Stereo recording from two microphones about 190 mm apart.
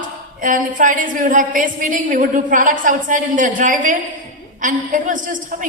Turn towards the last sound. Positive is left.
turn(degrees=-45)  # may be behind; listen again after turning